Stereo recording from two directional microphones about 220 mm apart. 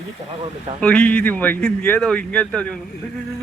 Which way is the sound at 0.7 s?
5° left (ahead or behind).